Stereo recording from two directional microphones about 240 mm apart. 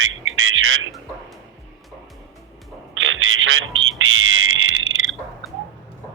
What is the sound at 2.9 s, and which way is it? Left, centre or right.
Telephone, right.